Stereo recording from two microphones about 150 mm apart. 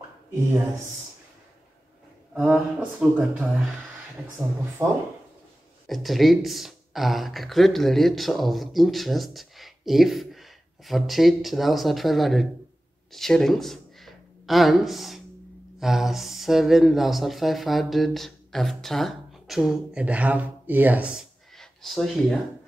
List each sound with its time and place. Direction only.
2.3 s speech: 10° right (ahead or behind)
4.8 s speech: 25° right (ahead or behind)
5.9 s speech: centre (ahead or behind)